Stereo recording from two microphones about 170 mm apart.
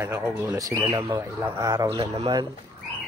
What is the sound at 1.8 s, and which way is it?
Speech, 35° right (ahead or behind).